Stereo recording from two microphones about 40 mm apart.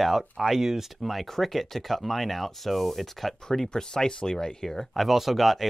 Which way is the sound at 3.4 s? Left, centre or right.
Centre.